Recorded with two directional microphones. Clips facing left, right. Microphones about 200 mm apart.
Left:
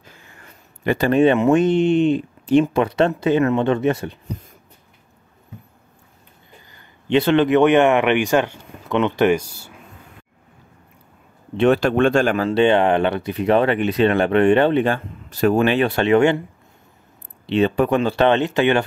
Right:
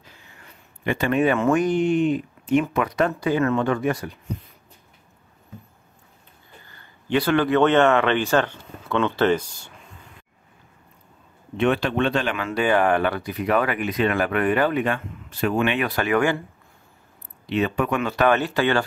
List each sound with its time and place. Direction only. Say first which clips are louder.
0.0 s speech: left 3 dB; 45° left (ahead or behind); by 4.2 s 25° left (ahead or behind)
6.6 s speech: left 1 dB; 15° left (ahead or behind)
11.5 s speech: left 5 dB; 35° left (ahead or behind)
17.5 s speech: left 5 dB; 30° left (ahead or behind)